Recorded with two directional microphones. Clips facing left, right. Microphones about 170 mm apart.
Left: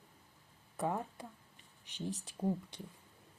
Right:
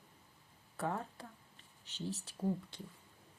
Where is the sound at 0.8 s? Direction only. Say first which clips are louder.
Left 2 dB; 15° left (ahead or behind).